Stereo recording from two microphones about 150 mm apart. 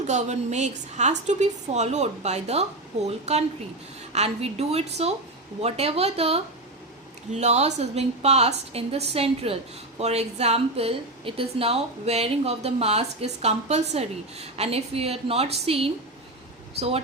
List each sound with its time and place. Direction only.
0.1 s a woman's voice: 50° right (ahead or behind)